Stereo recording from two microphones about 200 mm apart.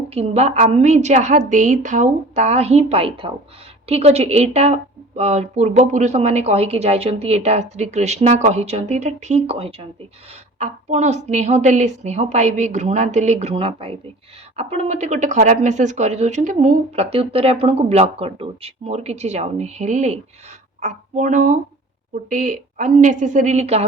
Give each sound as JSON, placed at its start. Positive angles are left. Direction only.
{"t": 0.1, "sound": "a woman's voice", "side_deg": -30}